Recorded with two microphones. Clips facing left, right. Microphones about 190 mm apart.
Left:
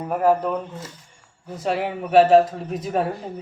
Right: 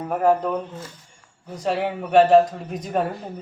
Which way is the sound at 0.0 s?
5° left (ahead or behind).